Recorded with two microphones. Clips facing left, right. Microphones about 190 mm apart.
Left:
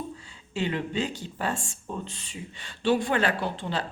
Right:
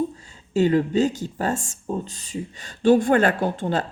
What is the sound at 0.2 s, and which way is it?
Speech, 40° right (ahead or behind).